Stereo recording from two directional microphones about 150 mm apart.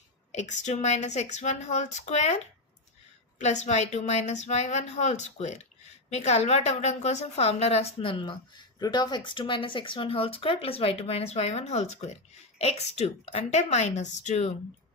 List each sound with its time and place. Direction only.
0.3 s a woman's voice: 50° left (ahead or behind)